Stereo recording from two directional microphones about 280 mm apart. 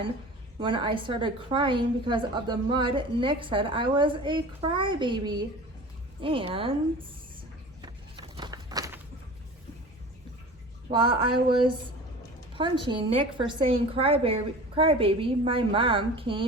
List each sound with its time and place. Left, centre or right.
0.6 s a woman's voice: centre
7.8 s walk: centre
10.9 s a woman's voice: centre